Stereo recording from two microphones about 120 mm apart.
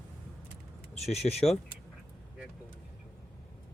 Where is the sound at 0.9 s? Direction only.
60° left (ahead or behind).